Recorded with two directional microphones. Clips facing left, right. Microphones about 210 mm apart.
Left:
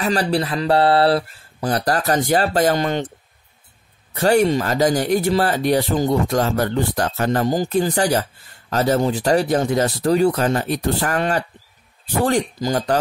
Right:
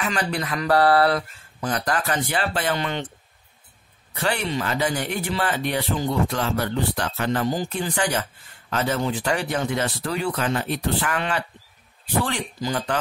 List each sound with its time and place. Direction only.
0.0 s speech: 35° left (ahead or behind)
4.1 s speech: 40° left (ahead or behind)